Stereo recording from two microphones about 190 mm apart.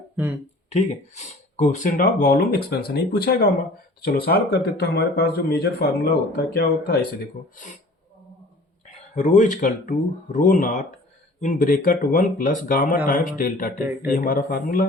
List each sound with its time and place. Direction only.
0.7 s speech: 35° left (ahead or behind); by 6.9 s 55° left (ahead or behind)
7.5 s speech: 40° left (ahead or behind)
9.1 s speech: 40° left (ahead or behind)